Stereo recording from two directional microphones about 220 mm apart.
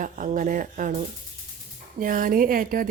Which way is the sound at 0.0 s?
35° right (ahead or behind).